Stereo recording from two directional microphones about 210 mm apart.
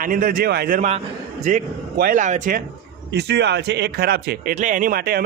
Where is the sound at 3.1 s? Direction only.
55° right (ahead or behind).